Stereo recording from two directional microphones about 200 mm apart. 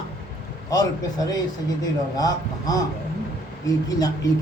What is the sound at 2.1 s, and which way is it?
Speech, 20° left (ahead or behind).